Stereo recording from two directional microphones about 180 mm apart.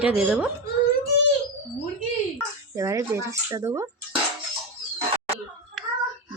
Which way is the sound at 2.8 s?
20° right (ahead or behind).